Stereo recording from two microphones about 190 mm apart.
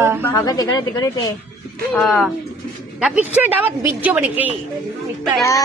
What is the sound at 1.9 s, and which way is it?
Speech, centre (ahead or behind).